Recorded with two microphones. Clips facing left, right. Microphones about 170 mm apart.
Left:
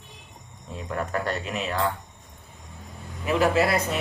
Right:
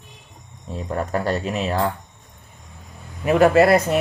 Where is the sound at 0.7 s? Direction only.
35° right (ahead or behind).